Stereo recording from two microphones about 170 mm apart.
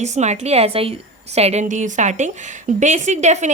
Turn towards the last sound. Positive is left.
turn(degrees=-40)  # may be behind; listen again after turning